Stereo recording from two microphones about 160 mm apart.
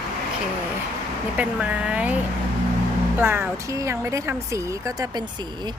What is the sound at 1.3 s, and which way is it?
A woman's voice, 10° right (ahead or behind).